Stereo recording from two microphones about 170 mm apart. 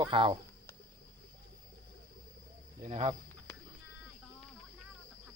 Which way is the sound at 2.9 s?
35° right (ahead or behind).